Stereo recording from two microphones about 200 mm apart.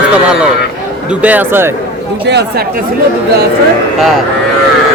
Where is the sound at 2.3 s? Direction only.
60° right (ahead or behind).